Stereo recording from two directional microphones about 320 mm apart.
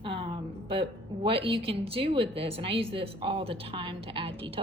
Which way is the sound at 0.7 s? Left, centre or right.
Centre.